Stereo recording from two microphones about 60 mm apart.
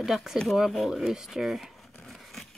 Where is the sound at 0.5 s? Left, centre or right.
Centre.